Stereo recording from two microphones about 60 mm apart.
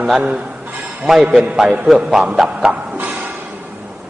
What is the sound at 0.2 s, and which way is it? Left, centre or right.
Speech, right.